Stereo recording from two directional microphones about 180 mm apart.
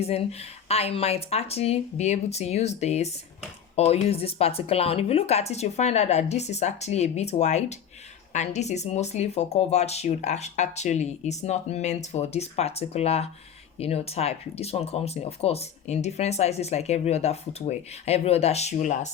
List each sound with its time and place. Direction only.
0.0 s speech: 35° left (ahead or behind)